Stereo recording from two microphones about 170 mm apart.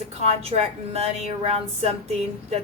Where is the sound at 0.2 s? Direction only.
40° right (ahead or behind).